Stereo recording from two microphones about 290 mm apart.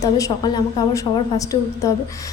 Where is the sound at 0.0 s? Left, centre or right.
Centre.